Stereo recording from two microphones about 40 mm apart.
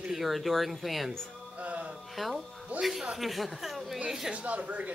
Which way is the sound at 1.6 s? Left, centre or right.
Right.